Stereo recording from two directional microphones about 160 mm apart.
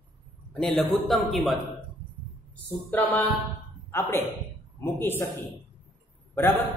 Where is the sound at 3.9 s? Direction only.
15° left (ahead or behind).